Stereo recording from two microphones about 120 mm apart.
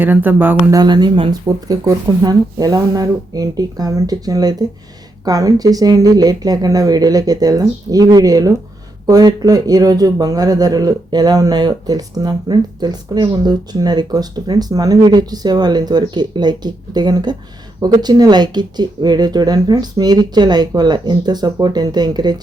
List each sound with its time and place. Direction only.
0.0 s speech: 15° right (ahead or behind)
0.7 s speech: 35° right (ahead or behind)
1.5 s speech: 30° right (ahead or behind)